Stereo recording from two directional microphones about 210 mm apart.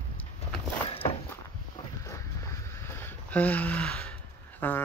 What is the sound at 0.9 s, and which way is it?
Walk, 25° left (ahead or behind).